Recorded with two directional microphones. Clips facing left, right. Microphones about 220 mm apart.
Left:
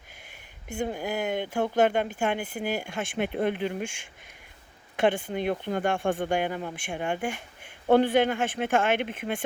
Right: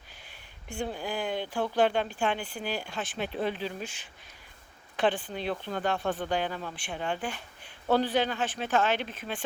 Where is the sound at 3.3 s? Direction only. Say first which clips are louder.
Left 4 dB; 55° left (ahead or behind).